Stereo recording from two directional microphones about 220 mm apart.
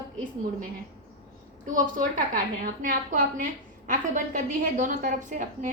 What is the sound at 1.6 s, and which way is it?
A woman's voice, 40° right (ahead or behind).